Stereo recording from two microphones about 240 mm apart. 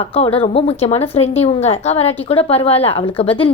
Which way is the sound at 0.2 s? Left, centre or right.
Left.